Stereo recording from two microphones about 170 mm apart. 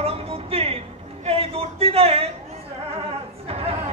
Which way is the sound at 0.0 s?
35° right (ahead or behind).